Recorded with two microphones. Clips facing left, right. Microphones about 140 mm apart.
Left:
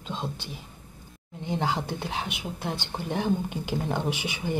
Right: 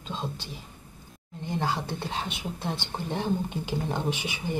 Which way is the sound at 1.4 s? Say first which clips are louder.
Left 1 dB; 20° left (ahead or behind).